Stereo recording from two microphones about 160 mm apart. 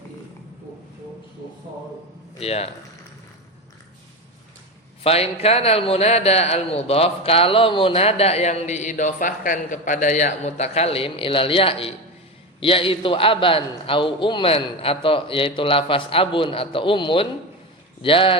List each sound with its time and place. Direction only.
2.4 s a man's voice: 40° left (ahead or behind)
5.0 s a man's voice: 40° left (ahead or behind)